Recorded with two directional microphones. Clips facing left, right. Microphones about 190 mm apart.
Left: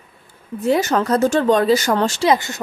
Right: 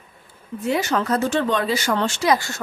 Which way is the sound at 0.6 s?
40° left (ahead or behind).